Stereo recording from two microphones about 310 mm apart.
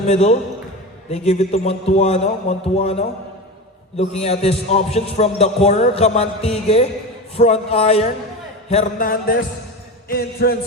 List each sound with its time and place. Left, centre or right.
0.0 s a man's voice: centre